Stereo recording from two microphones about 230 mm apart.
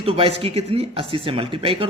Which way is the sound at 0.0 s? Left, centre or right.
Right.